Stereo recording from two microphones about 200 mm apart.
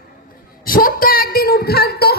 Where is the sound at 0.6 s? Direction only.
45° left (ahead or behind).